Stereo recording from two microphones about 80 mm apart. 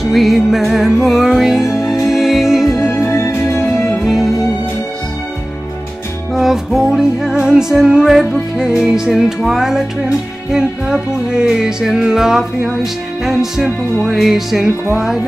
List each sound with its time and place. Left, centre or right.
0.0 s music: centre
2.9 s music: left
4.0 s music: centre
6.3 s music: centre